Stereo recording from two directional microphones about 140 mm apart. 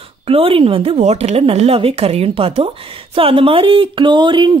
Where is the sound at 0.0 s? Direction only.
45° right (ahead or behind).